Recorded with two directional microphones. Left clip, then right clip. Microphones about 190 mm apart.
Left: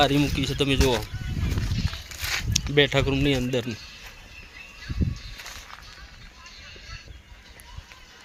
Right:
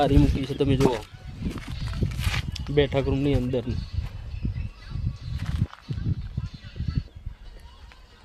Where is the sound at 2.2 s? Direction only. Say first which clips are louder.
Left 7 dB; centre (ahead or behind).